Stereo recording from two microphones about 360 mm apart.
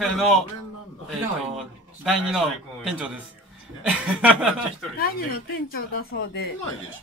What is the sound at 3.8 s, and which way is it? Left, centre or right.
Speech, centre.